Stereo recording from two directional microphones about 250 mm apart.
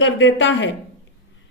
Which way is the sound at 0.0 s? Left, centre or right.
Left.